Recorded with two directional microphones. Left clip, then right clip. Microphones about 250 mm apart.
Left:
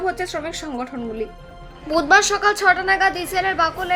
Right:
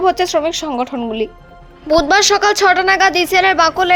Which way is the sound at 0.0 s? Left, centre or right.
Right.